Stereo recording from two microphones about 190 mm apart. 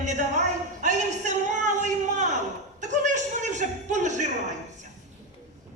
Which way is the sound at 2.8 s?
40° right (ahead or behind).